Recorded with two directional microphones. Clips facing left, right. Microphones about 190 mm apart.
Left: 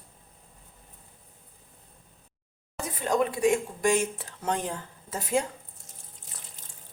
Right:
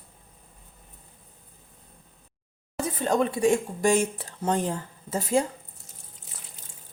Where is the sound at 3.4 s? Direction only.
30° right (ahead or behind).